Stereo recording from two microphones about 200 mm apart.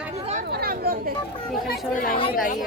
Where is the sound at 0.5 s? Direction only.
50° right (ahead or behind).